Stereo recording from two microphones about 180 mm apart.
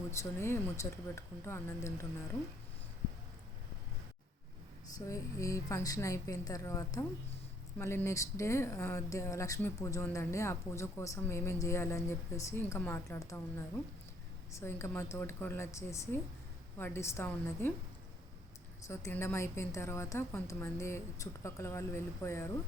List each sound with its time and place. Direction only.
0.2 s speech: 15° left (ahead or behind)
4.9 s speech: 20° left (ahead or behind)
18.9 s speech: 15° left (ahead or behind)